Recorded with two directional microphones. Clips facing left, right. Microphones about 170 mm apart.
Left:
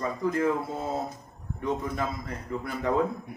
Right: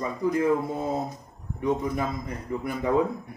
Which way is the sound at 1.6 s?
15° right (ahead or behind).